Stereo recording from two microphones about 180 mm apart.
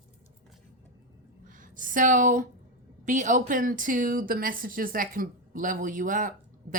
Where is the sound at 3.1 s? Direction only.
45° right (ahead or behind).